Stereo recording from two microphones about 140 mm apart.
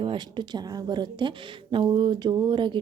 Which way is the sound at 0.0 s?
35° right (ahead or behind).